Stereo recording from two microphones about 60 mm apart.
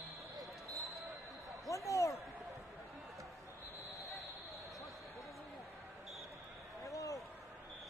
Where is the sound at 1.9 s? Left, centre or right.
Left.